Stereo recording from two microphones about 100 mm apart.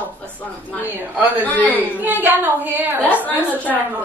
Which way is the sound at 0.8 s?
15° right (ahead or behind).